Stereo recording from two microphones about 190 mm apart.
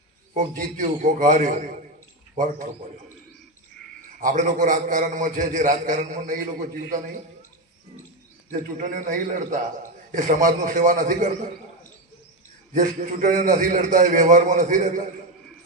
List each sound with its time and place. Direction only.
0.3 s a man's voice: 45° right (ahead or behind)
4.2 s a man's voice: 45° right (ahead or behind)
8.4 s a man's voice: 45° right (ahead or behind)
12.7 s a man's voice: 45° right (ahead or behind)